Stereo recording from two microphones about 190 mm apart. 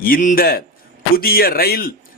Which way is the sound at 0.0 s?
45° left (ahead or behind).